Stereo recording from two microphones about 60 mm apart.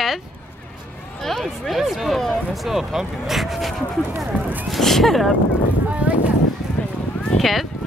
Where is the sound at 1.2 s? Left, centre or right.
Centre.